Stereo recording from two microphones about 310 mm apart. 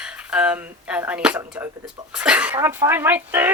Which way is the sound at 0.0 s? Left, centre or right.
Centre.